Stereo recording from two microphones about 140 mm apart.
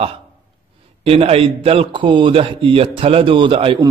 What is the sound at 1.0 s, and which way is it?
A man's voice, 45° right (ahead or behind).